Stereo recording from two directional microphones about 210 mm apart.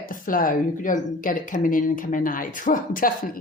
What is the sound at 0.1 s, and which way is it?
Speech, 40° left (ahead or behind).